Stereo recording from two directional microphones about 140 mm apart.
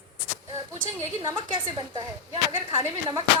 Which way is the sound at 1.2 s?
35° right (ahead or behind).